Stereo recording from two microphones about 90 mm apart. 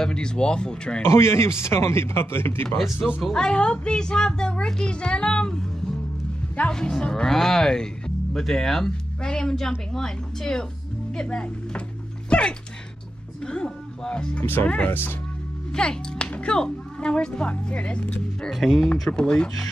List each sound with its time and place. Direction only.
0.0 s speech: 10° left (ahead or behind)
1.0 s a man's voice: 30° left (ahead or behind)
3.2 s a man's voice: 5° left (ahead or behind); by 15.1 s 25° left (ahead or behind)
15.7 s speech: 10° left (ahead or behind)
18.5 s speech: centre (ahead or behind)